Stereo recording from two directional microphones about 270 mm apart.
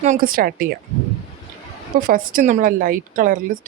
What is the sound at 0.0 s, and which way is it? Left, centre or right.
Speech, right.